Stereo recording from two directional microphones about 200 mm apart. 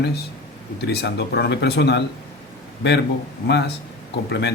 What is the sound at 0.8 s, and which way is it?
Speech, 55° left (ahead or behind).